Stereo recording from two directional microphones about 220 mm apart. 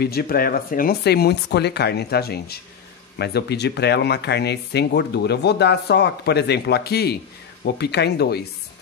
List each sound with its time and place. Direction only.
0.0 s speech: 45° left (ahead or behind)